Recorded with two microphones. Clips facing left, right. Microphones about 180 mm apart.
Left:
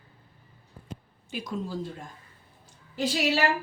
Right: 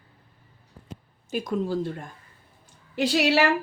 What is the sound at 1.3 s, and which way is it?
Speech, 55° right (ahead or behind).